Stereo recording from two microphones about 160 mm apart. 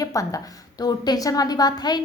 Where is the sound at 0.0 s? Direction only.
20° left (ahead or behind).